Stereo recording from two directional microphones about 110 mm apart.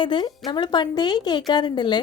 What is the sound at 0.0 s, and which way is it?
A woman's voice, 45° left (ahead or behind).